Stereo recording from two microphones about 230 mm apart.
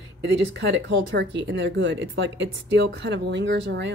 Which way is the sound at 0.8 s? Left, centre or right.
Right.